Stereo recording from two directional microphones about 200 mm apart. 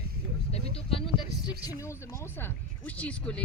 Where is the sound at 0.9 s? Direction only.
25° left (ahead or behind).